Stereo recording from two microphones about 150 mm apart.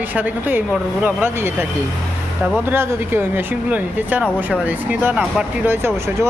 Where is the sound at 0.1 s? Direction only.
10° right (ahead or behind).